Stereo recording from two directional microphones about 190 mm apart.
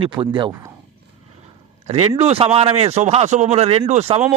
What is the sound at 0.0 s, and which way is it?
Speech, 25° right (ahead or behind).